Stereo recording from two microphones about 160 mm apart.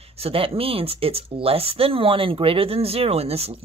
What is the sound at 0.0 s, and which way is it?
Speech, 40° right (ahead or behind).